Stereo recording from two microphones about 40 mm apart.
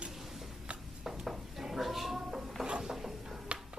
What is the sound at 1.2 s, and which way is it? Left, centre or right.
Goat, centre.